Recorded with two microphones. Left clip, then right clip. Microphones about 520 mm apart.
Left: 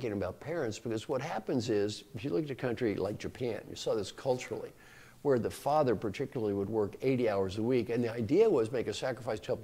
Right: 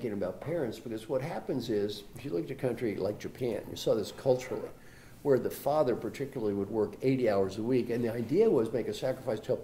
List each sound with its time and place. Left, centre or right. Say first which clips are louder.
0.0 s speech: right 1 dB; left